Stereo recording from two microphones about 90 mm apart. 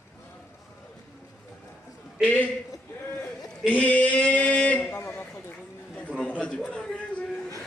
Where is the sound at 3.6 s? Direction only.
15° left (ahead or behind).